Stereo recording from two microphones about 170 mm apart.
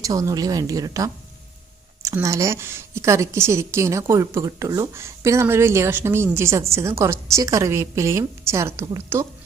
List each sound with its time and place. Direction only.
0.0 s a woman's voice: 20° right (ahead or behind)